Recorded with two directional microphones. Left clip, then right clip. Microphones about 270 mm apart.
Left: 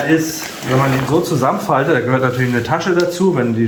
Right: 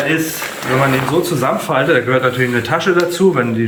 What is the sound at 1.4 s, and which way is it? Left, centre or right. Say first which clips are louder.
A man's voice: right 1 dB; centre.